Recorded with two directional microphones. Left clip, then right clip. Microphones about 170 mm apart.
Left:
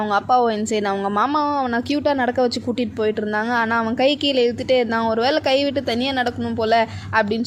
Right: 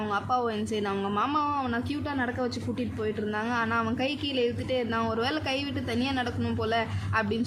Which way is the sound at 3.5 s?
40° left (ahead or behind).